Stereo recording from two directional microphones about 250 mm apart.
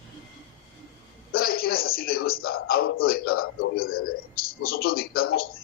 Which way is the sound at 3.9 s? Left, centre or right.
Left.